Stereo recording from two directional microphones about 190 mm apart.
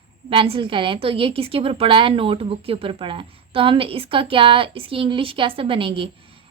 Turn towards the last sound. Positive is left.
turn(degrees=-30)  # may be behind; listen again after turning